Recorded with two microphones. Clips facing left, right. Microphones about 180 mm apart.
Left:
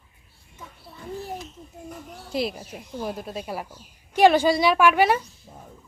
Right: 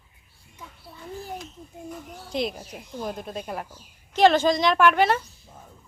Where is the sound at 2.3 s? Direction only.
5° left (ahead or behind).